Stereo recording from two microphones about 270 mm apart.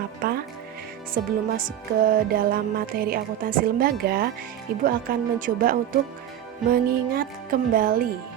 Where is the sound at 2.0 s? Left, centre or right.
Right.